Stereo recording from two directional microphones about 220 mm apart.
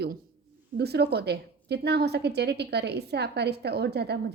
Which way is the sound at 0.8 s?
45° right (ahead or behind).